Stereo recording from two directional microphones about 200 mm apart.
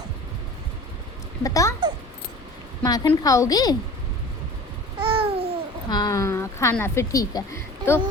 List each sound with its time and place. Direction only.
1.5 s speech: 15° left (ahead or behind)
2.8 s a woman's voice: 20° left (ahead or behind)
4.9 s babbling: 25° right (ahead or behind)
5.9 s speech: 20° left (ahead or behind)